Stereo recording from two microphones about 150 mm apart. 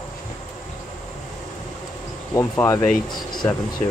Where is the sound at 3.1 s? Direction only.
Centre (ahead or behind).